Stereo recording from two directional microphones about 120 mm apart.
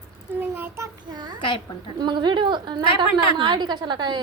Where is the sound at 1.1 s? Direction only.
35° right (ahead or behind).